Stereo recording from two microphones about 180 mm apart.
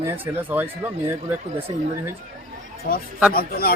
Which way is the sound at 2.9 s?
55° left (ahead or behind).